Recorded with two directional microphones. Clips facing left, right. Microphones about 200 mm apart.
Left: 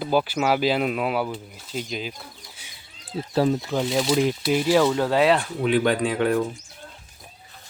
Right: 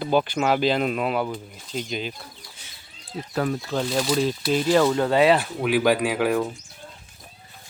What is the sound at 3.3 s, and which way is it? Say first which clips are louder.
Speech: left 3 dB; 25° left (ahead or behind).